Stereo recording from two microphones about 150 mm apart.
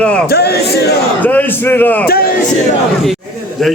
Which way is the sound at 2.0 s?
90° left.